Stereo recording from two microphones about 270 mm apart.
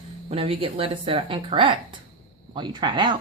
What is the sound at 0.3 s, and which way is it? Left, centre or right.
Speech, right.